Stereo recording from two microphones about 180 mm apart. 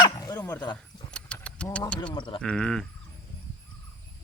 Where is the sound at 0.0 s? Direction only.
20° left (ahead or behind).